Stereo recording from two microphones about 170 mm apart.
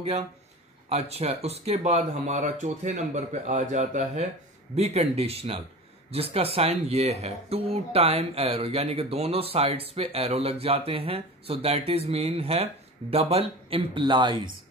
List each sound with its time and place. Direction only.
0.8 s speech: 40° right (ahead or behind)